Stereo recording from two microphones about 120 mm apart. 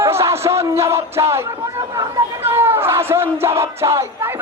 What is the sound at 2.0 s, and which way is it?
Crowd, 20° right (ahead or behind).